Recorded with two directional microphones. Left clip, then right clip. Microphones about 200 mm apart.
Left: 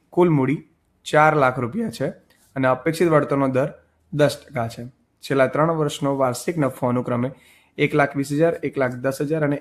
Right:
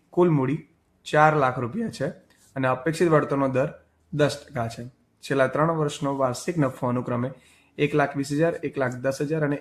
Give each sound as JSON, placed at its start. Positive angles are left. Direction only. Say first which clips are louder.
{"t": 0.1, "sound": "speech", "louder": "left 3 dB", "side_deg": 30}